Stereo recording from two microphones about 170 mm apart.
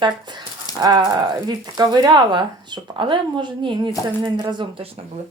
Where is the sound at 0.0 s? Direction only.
25° right (ahead or behind).